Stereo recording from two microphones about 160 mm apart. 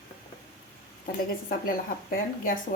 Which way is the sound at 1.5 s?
65° left (ahead or behind).